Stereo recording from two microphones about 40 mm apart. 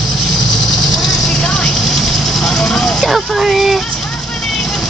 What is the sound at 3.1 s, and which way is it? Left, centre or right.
Speech, centre.